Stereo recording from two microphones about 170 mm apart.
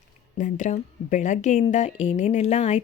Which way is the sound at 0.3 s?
50° left (ahead or behind).